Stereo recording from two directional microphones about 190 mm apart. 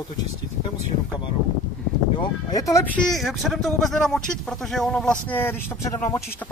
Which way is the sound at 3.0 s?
Centre (ahead or behind).